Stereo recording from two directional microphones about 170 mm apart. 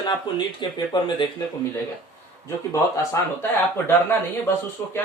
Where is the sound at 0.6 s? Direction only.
25° left (ahead or behind).